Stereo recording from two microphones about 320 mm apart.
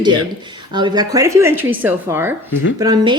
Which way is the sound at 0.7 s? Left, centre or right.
Centre.